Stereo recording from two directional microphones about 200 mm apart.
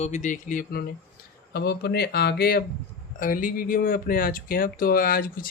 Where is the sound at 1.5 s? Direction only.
55° left (ahead or behind).